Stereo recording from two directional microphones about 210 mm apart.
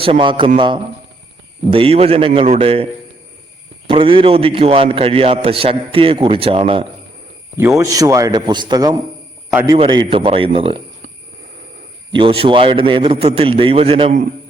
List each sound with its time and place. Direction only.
0.0 s a man's voice: 25° right (ahead or behind)
3.8 s a man's voice: 25° right (ahead or behind)
7.5 s a man's voice: 10° right (ahead or behind)
9.5 s a man's voice: 10° right (ahead or behind)
9.7 s a man's voice: 25° right (ahead or behind)
12.1 s a man's voice: 25° right (ahead or behind)